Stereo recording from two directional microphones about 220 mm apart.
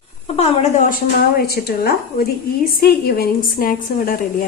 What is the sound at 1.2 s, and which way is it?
A woman's voice, 45° left (ahead or behind).